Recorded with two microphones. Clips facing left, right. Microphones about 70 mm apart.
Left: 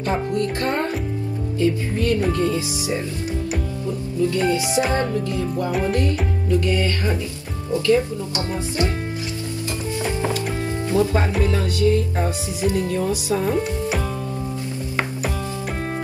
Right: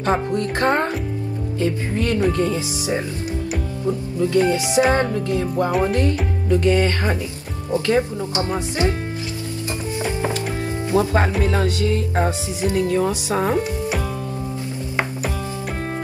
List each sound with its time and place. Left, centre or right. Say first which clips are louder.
0.3 s speech: right 3 dB; right
4.2 s speech: right 2 dB; right
4.9 s speech: right 2 dB; right
12.7 s speech: right 3 dB; right
13.6 s speech: even; centre